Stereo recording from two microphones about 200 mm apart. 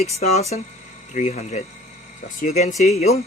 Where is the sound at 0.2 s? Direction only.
35° left (ahead or behind).